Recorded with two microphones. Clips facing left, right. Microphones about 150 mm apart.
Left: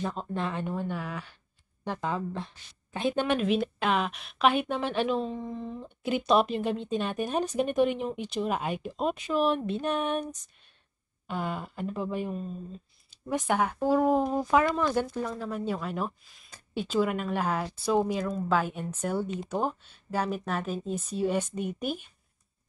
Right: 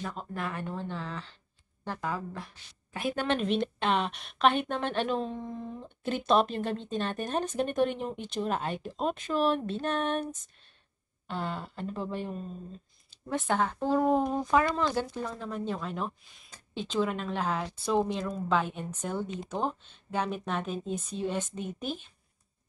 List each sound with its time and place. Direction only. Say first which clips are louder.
0.0 s a woman's voice: left 4 dB; 25° left (ahead or behind)
1.9 s a woman's voice: left 3 dB; 25° left (ahead or behind)
3.3 s speech: left 2 dB; 5° left (ahead or behind)
11.2 s speech: left 2 dB; 10° left (ahead or behind)